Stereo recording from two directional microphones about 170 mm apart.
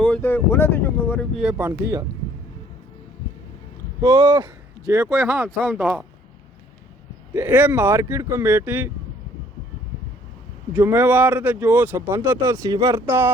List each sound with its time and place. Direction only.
0.0 s speech: 10° left (ahead or behind)
1.4 s speech: 10° right (ahead or behind)
4.0 s speech: 25° right (ahead or behind); by 6.1 s 10° right (ahead or behind)
7.3 s speech: 10° right (ahead or behind)
10.8 s speech: 10° right (ahead or behind)